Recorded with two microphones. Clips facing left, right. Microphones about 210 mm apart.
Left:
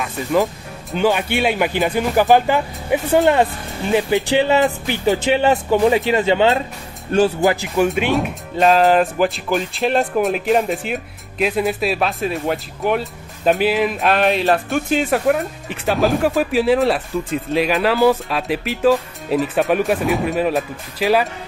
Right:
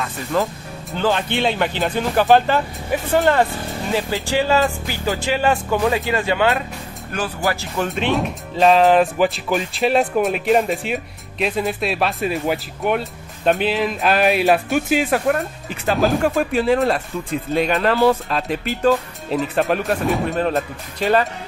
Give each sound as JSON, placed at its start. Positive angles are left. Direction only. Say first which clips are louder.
{"t": 0.9, "sound": "speech", "louder": "left 2 dB", "side_deg": 10}
{"t": 7.9, "sound": "speech", "louder": "left 2 dB", "side_deg": 0}